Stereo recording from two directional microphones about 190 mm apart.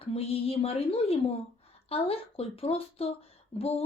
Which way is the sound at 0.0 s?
30° left (ahead or behind).